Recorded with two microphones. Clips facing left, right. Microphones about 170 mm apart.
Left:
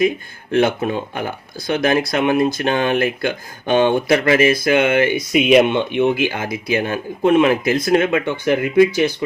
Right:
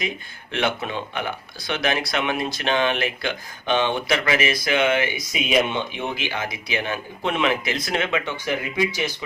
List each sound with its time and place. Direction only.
0.5 s speech: 45° left (ahead or behind)